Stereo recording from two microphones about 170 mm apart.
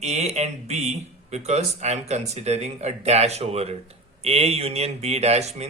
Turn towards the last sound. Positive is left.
turn(degrees=-40)  # may be behind; listen again after turning